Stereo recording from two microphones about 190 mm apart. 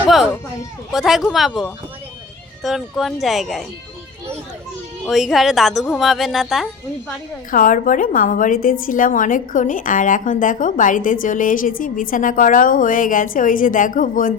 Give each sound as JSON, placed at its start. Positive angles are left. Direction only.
{"t": 0.0, "sound": "a woman's voice", "side_deg": 0}
{"t": 2.6, "sound": "a woman's voice", "side_deg": 0}
{"t": 5.0, "sound": "a woman's voice", "side_deg": 0}
{"t": 7.5, "sound": "a woman's voice", "side_deg": 45}